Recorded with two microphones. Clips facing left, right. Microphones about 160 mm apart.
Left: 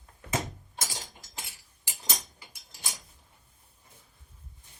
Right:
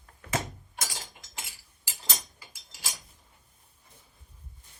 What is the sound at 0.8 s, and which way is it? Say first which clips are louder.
Cutlery: even; 25° left (ahead or behind).